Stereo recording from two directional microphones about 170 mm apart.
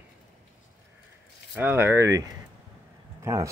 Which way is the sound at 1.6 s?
10° right (ahead or behind).